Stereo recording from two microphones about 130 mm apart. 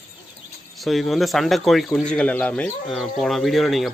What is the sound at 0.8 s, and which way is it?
Speech, centre (ahead or behind).